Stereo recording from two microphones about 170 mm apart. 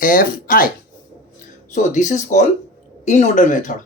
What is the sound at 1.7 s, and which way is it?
Speech, 45° left (ahead or behind).